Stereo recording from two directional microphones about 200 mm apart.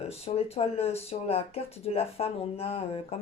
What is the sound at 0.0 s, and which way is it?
Speech, 30° left (ahead or behind).